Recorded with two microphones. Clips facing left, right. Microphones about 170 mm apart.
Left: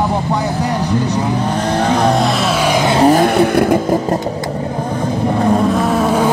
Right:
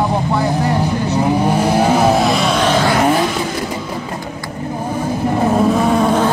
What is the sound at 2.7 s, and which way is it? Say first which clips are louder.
Vehicle: left 2 dB; 15° left (ahead or behind).